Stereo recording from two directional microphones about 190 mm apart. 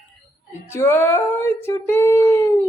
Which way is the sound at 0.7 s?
15° left (ahead or behind).